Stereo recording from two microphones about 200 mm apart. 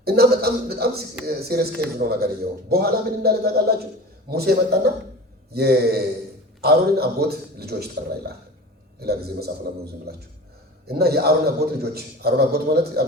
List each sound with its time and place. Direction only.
0.0 s a man's voice: 50° right (ahead or behind)